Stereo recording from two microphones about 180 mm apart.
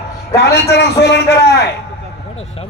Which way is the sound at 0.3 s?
65° left (ahead or behind).